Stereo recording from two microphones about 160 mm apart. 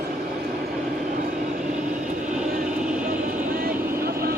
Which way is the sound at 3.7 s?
70° right (ahead or behind).